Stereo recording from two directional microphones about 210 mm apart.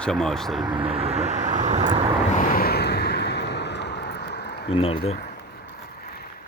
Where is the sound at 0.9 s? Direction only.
30° right (ahead or behind).